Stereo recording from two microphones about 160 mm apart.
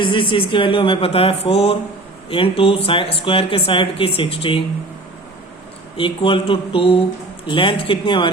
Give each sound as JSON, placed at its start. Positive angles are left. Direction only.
{"t": 0.0, "sound": "speech", "side_deg": 30}
{"t": 6.0, "sound": "speech", "side_deg": 35}